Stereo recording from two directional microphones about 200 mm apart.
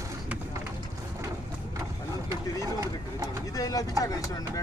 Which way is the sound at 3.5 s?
15° left (ahead or behind).